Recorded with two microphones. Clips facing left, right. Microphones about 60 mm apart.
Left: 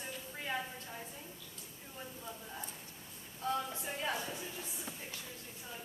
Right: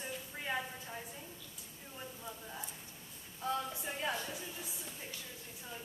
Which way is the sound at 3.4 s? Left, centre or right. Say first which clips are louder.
Left 1 dB; centre.